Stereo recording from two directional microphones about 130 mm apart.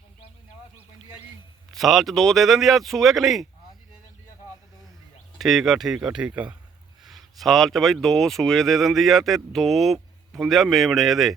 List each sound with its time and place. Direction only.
1.7 s speech: centre (ahead or behind)
5.4 s speech: centre (ahead or behind)